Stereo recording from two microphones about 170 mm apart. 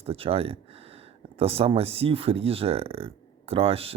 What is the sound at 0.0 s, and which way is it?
Speech, 35° right (ahead or behind).